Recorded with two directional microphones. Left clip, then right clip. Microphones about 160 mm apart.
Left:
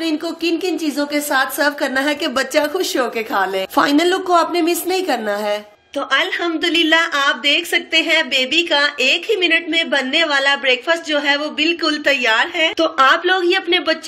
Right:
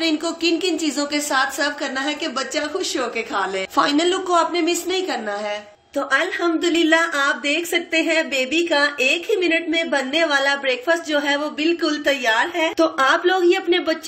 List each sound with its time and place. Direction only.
0.0 s a woman's voice: 15° left (ahead or behind); by 5.6 s 40° left (ahead or behind)
5.9 s a woman's voice: 5° right (ahead or behind)